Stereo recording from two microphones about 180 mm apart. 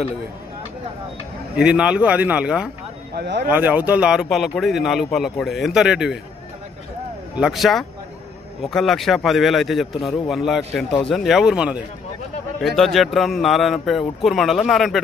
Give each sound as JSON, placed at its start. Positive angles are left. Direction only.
{"t": 1.6, "sound": "speech", "side_deg": -5}
{"t": 3.2, "sound": "speech", "side_deg": -70}
{"t": 3.4, "sound": "speech", "side_deg": -10}
{"t": 7.3, "sound": "speech", "side_deg": 0}